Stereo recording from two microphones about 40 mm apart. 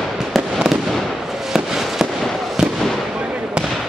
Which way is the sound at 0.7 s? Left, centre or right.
Centre.